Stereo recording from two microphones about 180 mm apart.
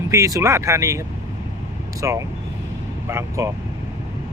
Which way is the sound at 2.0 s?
15° right (ahead or behind).